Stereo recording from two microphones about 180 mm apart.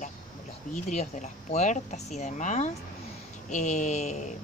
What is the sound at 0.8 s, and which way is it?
Speech, 40° left (ahead or behind).